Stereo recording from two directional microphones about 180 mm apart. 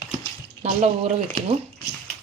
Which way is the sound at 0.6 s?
35° right (ahead or behind).